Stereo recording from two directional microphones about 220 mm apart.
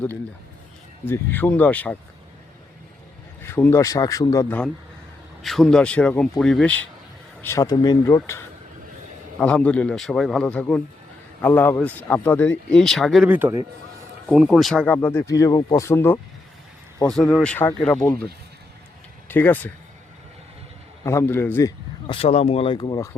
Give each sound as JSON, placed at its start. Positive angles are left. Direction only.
{"t": 1.0, "sound": "a man's voice", "side_deg": 10}
{"t": 3.4, "sound": "a man's voice", "side_deg": 10}
{"t": 9.4, "sound": "a man's voice", "side_deg": 5}
{"t": 19.3, "sound": "a man's voice", "side_deg": 10}
{"t": 21.0, "sound": "a man's voice", "side_deg": 15}
{"t": 22.0, "sound": "speech", "side_deg": 25}